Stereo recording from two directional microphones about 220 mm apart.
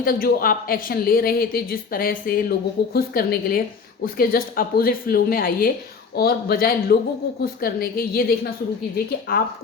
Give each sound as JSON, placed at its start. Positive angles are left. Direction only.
{"t": 0.0, "sound": "a woman's voice", "side_deg": 40}